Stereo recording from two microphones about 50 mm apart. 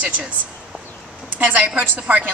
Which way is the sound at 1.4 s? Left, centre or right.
Right.